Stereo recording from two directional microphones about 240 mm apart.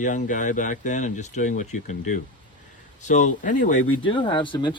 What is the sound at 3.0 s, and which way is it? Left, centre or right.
Speech, left.